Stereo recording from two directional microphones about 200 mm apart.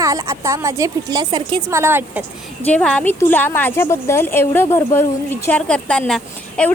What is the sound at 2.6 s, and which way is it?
A woman's voice, 5° left (ahead or behind).